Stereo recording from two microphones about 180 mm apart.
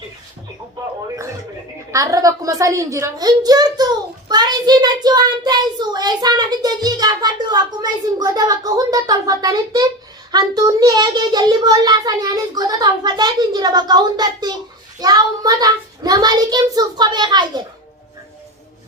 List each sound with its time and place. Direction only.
1.9 s a woman's voice: 20° right (ahead or behind)